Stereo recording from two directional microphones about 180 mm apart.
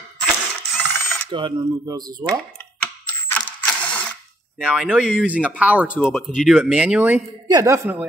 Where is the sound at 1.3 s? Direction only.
25° right (ahead or behind).